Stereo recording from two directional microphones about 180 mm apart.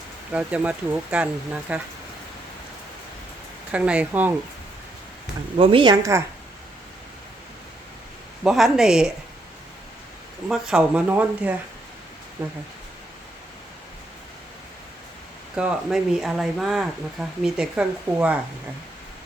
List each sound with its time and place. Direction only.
0.3 s speech: 5° right (ahead or behind)
3.7 s speech: 5° right (ahead or behind)
5.5 s a woman's voice: 25° right (ahead or behind)
8.4 s speech: centre (ahead or behind)
10.5 s speech: 5° right (ahead or behind)
15.5 s speech: 5° right (ahead or behind)